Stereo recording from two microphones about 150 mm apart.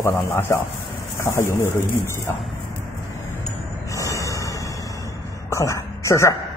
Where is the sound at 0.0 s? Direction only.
15° left (ahead or behind).